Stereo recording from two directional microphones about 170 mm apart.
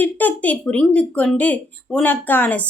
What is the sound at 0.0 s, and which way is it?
Speech, 10° left (ahead or behind).